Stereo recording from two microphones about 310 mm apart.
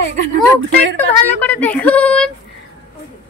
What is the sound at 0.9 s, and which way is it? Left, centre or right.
Speech, centre.